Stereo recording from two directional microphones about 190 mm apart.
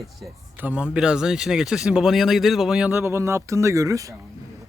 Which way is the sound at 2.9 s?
15° right (ahead or behind).